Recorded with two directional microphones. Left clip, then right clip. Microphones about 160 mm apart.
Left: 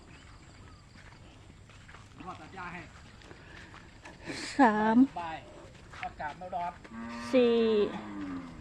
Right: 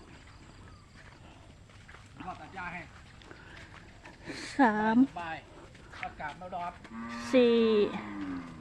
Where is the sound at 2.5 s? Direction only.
60° right (ahead or behind).